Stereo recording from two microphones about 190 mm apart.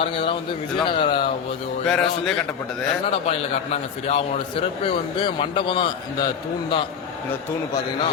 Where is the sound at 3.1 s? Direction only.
35° left (ahead or behind).